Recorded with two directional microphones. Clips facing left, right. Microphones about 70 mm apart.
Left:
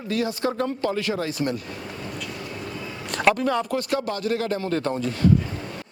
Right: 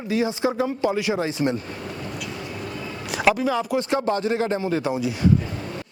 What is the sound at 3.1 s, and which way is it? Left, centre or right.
Speech, centre.